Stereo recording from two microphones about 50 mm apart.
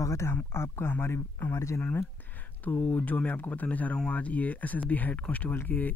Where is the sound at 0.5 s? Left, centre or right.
Left.